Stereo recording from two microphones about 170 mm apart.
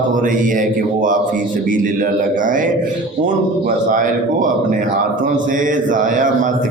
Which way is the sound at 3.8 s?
50° right (ahead or behind).